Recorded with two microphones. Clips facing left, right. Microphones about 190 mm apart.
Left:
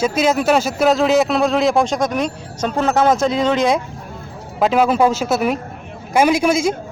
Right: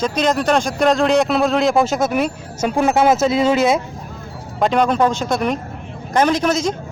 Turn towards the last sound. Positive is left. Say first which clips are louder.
# left 2 dB
turn(degrees=10)  # may be behind; listen again after turning